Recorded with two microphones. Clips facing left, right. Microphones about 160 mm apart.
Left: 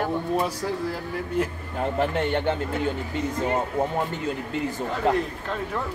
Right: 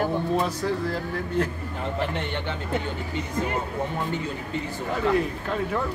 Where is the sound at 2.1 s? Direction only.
45° left (ahead or behind).